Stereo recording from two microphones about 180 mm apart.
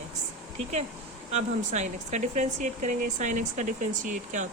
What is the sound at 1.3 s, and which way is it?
Speech, 40° right (ahead or behind).